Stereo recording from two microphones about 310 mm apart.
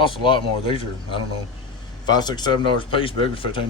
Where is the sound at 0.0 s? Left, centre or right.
Centre.